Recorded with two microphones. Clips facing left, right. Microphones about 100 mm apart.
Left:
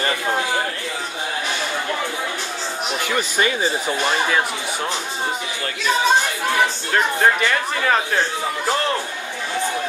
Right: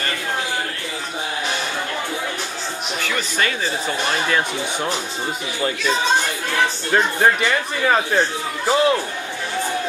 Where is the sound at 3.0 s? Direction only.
15° left (ahead or behind).